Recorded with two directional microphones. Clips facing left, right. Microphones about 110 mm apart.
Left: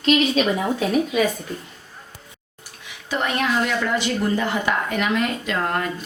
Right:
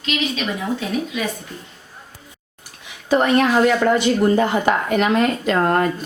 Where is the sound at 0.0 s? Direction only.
40° left (ahead or behind).